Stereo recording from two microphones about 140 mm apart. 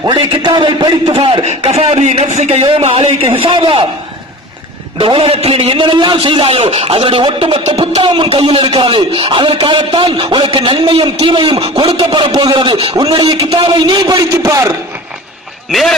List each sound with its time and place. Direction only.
0.0 s a man's voice: 35° right (ahead or behind)
1.5 s speech: 45° right (ahead or behind)
2.6 s a man's voice: 40° right (ahead or behind)
4.9 s a man's voice: 40° right (ahead or behind); by 14.7 s 20° right (ahead or behind)
15.7 s a man's voice: centre (ahead or behind)